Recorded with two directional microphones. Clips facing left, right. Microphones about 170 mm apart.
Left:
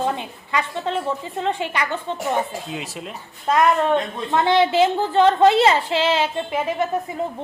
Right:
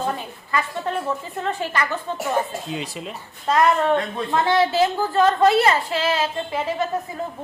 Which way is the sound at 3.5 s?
20° left (ahead or behind).